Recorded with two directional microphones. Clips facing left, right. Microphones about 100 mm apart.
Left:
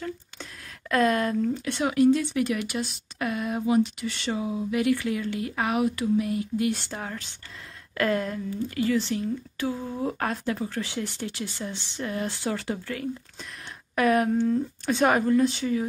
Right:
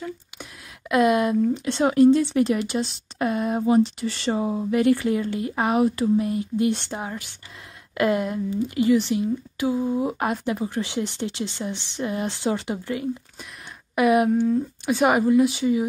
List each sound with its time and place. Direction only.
0.0 s speech: 15° right (ahead or behind)